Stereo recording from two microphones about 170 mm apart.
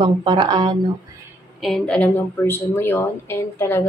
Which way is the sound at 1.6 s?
5° left (ahead or behind).